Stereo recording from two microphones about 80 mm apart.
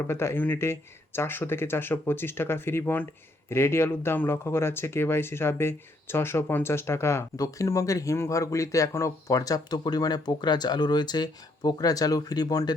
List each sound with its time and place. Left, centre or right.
0.1 s speech: left